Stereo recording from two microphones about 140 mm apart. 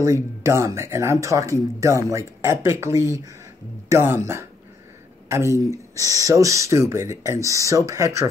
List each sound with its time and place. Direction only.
0.0 s speech: 20° right (ahead or behind)